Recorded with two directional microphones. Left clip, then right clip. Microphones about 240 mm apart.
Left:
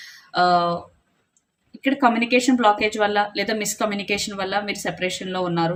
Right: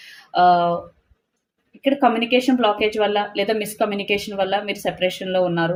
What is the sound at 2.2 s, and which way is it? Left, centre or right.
Speech, left.